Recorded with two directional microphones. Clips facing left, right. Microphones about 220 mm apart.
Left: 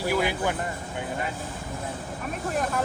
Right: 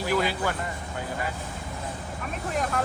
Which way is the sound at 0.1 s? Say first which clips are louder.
Even; 15° left (ahead or behind).